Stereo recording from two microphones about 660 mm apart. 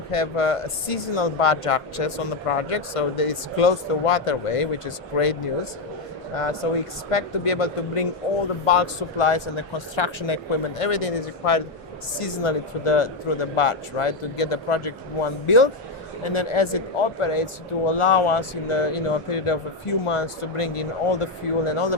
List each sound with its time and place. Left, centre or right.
0.1 s speech: left